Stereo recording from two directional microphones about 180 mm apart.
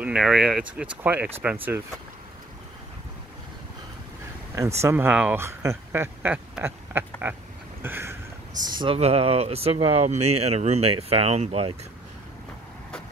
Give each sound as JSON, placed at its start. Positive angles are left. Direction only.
{"t": 0.0, "sound": "speech", "side_deg": -5}
{"t": 4.8, "sound": "speech", "side_deg": -10}
{"t": 7.8, "sound": "a sound", "side_deg": -15}
{"t": 8.6, "sound": "speech", "side_deg": -25}